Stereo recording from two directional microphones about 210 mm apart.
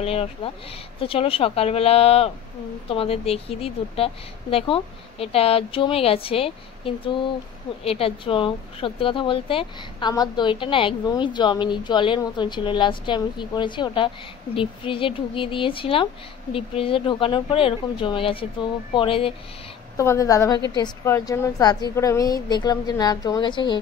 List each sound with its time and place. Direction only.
0.0 s speech: 30° left (ahead or behind)
20.0 s a woman's voice: 15° left (ahead or behind)